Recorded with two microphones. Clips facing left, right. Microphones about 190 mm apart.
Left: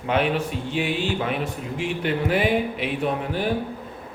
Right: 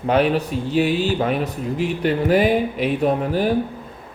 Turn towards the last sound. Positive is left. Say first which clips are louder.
# right 6 dB
turn(degrees=-40)  # may be behind; listen again after turning